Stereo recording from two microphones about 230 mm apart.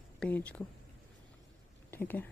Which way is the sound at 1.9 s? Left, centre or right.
Centre.